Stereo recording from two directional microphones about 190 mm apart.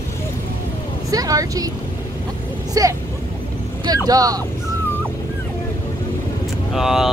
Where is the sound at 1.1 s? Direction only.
20° right (ahead or behind).